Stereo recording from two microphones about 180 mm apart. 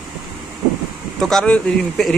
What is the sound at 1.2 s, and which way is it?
Speech, 5° left (ahead or behind).